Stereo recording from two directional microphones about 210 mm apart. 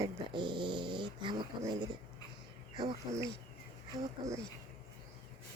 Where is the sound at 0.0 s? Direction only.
20° right (ahead or behind).